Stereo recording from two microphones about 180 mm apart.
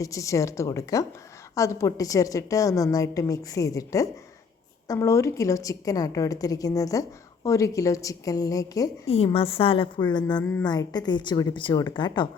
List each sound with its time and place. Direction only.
0.0 s a woman's voice: 15° left (ahead or behind)
9.0 s a woman's voice: 30° left (ahead or behind)